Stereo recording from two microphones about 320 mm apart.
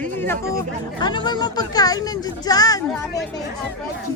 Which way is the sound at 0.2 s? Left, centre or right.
Centre.